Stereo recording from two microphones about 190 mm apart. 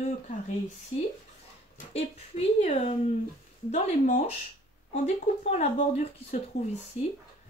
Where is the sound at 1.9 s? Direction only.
30° left (ahead or behind).